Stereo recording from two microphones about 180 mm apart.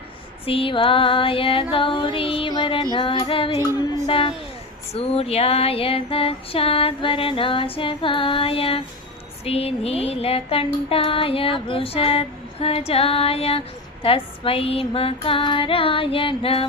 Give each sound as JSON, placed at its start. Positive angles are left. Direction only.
{"t": 0.4, "sound": "female singing", "side_deg": 30}